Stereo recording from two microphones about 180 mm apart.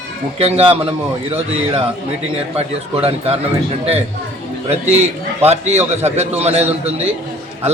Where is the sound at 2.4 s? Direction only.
35° right (ahead or behind).